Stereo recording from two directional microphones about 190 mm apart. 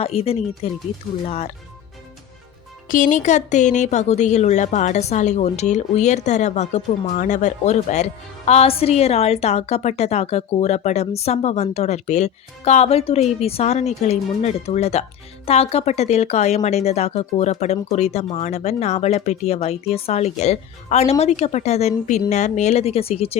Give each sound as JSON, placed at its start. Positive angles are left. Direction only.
{"t": 0.0, "sound": "speech", "side_deg": 30}
{"t": 2.9, "sound": "speech", "side_deg": 40}